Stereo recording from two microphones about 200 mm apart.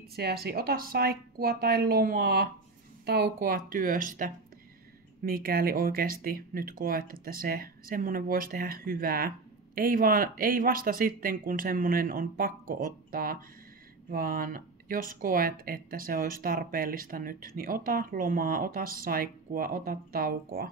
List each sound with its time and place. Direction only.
0.1 s speech: 50° right (ahead or behind)